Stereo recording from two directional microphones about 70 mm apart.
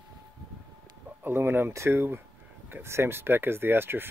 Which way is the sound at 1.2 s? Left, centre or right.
Right.